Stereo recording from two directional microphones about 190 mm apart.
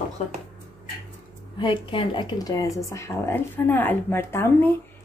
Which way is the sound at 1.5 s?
25° left (ahead or behind).